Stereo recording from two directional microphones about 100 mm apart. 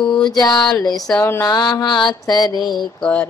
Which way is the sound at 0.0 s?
45° left (ahead or behind).